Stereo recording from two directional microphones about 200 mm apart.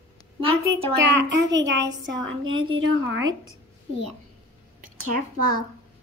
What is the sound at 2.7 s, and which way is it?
Speech, 75° right (ahead or behind).